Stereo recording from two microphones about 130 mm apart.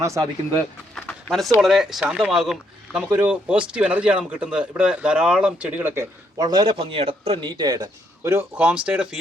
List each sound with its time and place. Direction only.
0.0 s speech: 25° right (ahead or behind)
0.9 s a sound: 5° left (ahead or behind)
1.6 s speech: centre (ahead or behind); by 7.5 s 50° right (ahead or behind)
7.5 s speech: 35° right (ahead or behind)
8.5 s speech: 10° right (ahead or behind)